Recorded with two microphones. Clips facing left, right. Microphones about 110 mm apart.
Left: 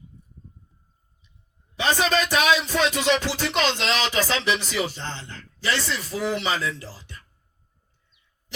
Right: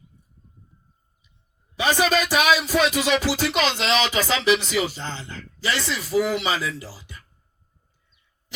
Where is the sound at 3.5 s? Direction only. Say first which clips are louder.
Even; 30° left (ahead or behind).